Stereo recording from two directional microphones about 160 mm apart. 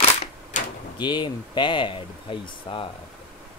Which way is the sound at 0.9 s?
30° left (ahead or behind).